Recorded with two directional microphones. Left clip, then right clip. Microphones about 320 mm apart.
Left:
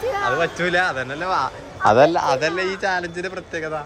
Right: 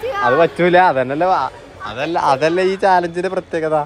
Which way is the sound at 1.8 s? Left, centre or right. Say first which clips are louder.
Left 11 dB; centre.